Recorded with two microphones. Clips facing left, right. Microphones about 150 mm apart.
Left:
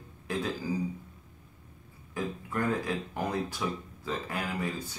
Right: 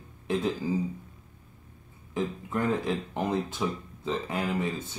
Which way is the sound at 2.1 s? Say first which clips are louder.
Right 3 dB; 20° right (ahead or behind).